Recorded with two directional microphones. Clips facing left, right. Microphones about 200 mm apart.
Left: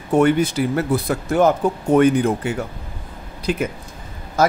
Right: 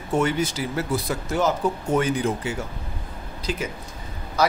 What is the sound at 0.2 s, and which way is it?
Speech, 55° left (ahead or behind).